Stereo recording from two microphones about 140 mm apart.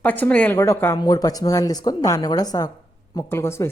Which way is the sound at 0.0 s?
10° left (ahead or behind).